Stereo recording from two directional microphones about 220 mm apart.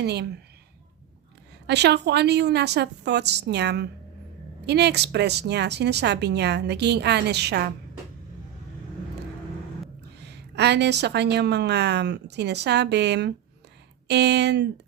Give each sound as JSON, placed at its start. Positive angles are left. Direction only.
{"t": 0.0, "sound": "speech", "side_deg": -50}
{"t": 1.6, "sound": "speech", "side_deg": -50}
{"t": 10.2, "sound": "speech", "side_deg": -50}